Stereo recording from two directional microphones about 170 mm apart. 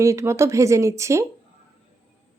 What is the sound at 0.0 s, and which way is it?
A woman's voice, 15° right (ahead or behind).